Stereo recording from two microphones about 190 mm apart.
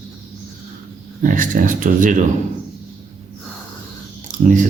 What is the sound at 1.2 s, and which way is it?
Speech, 45° right (ahead or behind).